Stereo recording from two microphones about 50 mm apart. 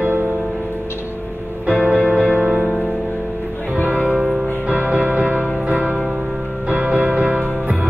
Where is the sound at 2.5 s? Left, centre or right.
Centre.